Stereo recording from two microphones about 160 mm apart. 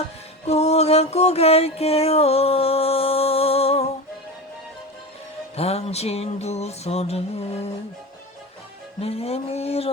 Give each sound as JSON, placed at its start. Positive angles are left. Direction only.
{"t": 0.4, "sound": "music", "side_deg": 40}
{"t": 5.5, "sound": "mantra", "side_deg": 40}
{"t": 9.0, "sound": "mantra", "side_deg": 40}